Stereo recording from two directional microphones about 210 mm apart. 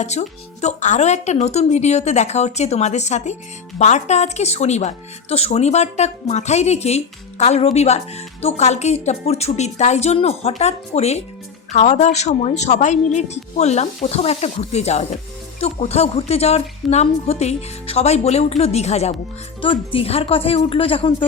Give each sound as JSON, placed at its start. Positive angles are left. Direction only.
{"t": 0.0, "sound": "a woman's voice", "side_deg": 35}